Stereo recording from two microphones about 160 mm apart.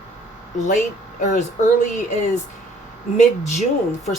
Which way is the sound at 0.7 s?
50° left (ahead or behind).